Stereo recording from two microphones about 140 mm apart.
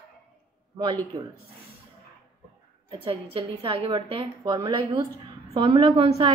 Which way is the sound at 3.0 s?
40° right (ahead or behind).